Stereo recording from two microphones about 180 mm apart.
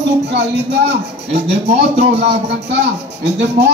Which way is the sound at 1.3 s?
35° right (ahead or behind).